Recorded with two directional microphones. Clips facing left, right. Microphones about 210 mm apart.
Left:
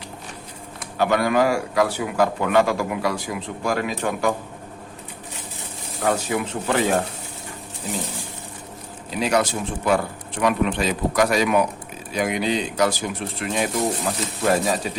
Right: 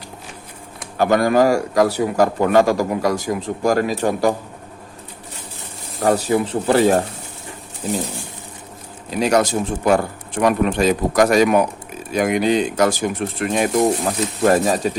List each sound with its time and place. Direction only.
0.9 s a man's voice: 40° right (ahead or behind)
6.0 s a man's voice: 40° right (ahead or behind)
9.1 s speech: 45° right (ahead or behind)